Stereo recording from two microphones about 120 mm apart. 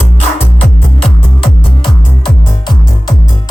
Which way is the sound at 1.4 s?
45° left (ahead or behind).